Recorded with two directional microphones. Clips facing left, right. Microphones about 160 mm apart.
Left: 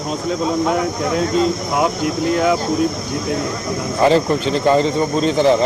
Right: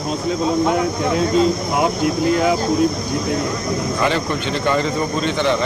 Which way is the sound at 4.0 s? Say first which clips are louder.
Left 10 dB; 35° left (ahead or behind).